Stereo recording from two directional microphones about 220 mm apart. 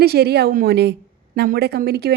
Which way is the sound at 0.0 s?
45° right (ahead or behind).